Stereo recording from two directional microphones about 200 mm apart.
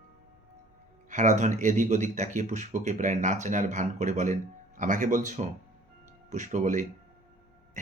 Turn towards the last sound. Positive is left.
turn(degrees=-40)  # may be behind; listen again after turning